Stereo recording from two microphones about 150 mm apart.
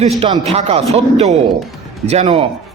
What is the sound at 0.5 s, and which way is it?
A man's voice, 45° right (ahead or behind).